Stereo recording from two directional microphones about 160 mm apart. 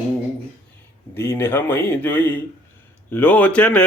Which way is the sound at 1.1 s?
15° left (ahead or behind).